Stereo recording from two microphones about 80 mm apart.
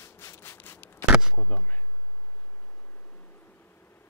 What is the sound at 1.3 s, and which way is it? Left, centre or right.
Bee, centre.